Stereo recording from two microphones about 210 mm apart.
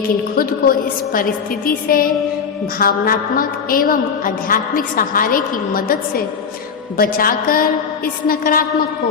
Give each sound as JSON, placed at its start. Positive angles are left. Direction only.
{"t": 0.3, "sound": "a woman's voice", "side_deg": 45}